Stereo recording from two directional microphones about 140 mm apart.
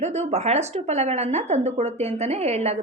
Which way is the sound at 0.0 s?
50° right (ahead or behind).